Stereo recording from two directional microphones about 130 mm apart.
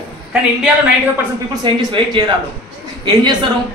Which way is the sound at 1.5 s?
35° right (ahead or behind).